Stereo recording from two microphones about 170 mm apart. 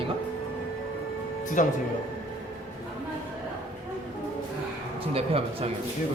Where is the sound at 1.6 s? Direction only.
50° left (ahead or behind).